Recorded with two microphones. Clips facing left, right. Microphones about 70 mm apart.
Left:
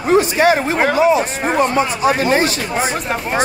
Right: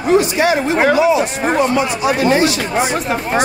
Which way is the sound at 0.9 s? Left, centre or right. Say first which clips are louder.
Even; left.